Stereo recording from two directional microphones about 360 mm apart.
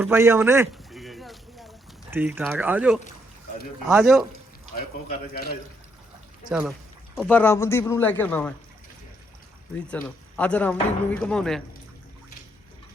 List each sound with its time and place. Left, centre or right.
0.0 s a sound: centre
3.8 s speech: centre
4.7 s speech: left
6.5 s speech: centre
9.9 s speech: centre